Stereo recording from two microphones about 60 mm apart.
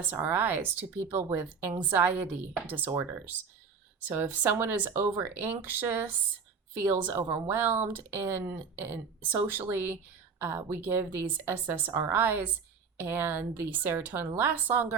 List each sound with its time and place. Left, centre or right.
0.2 s speech: right
4.5 s speech: right